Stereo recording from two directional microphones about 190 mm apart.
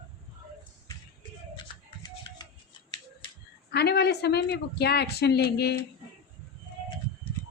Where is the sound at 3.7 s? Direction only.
60° left (ahead or behind).